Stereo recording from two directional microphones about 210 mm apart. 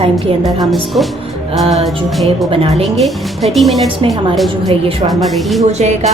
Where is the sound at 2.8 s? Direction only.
Centre (ahead or behind).